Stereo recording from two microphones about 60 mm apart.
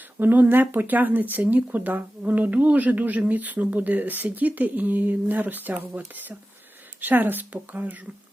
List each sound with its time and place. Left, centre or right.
0.2 s speech: right
7.0 s speech: right